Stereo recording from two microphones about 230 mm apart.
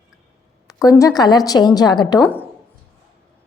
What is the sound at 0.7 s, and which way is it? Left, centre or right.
A woman's voice, centre.